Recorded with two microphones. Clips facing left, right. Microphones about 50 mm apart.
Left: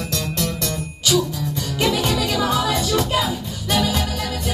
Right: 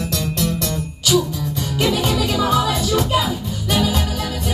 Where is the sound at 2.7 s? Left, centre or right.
Centre.